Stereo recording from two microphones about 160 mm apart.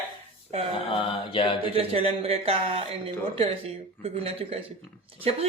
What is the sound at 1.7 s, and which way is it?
Speech, 35° right (ahead or behind).